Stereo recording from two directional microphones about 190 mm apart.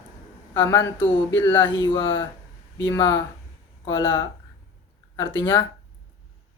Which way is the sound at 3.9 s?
25° left (ahead or behind).